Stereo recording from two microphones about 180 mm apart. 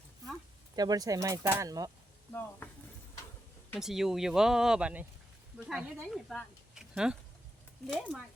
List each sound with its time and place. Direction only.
0.8 s speech: 20° right (ahead or behind)
3.8 s speech: centre (ahead or behind)